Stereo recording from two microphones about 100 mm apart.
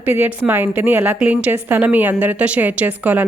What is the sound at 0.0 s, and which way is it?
A woman's voice, 20° right (ahead or behind).